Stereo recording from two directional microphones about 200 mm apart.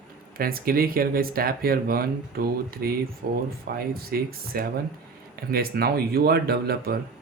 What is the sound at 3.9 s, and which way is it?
Speech, 50° right (ahead or behind).